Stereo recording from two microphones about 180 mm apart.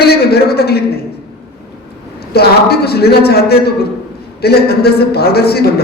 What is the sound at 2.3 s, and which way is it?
A man's voice, 60° left (ahead or behind).